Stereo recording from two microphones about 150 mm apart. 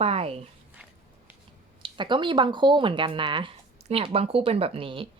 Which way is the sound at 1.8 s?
30° right (ahead or behind).